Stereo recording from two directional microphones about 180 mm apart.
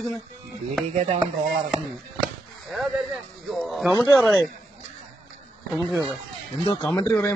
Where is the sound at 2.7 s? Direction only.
Centre (ahead or behind).